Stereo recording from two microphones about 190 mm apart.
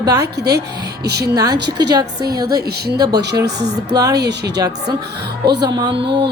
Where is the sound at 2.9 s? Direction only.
20° right (ahead or behind).